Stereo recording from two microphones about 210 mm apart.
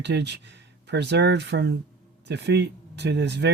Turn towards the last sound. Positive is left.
turn(degrees=-55)  # may be behind; listen again after turning